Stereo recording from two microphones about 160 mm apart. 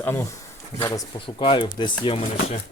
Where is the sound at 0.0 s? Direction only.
15° left (ahead or behind); by 2.2 s 30° left (ahead or behind).